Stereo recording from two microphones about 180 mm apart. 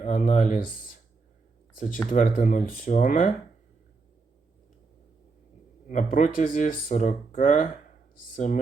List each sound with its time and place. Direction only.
0.0 s speech: 45° left (ahead or behind)
5.9 s speech: 40° left (ahead or behind)